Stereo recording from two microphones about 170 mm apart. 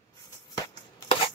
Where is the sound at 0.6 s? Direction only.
30° left (ahead or behind).